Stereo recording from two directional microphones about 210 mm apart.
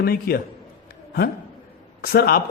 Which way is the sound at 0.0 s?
45° left (ahead or behind).